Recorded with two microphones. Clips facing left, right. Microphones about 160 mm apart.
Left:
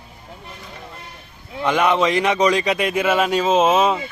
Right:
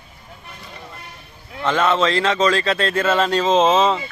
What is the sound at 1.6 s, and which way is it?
Speech, 15° left (ahead or behind).